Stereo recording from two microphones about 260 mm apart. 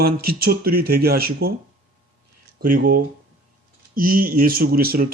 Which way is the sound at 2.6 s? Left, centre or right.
Right.